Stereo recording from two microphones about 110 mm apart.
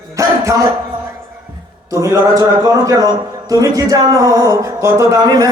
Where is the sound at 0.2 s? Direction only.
30° right (ahead or behind).